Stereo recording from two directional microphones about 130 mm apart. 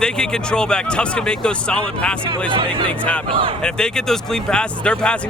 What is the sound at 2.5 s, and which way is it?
Speech, 40° right (ahead or behind).